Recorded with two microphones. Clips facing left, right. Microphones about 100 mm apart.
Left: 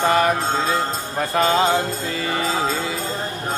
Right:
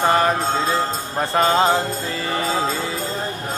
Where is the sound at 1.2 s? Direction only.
35° right (ahead or behind).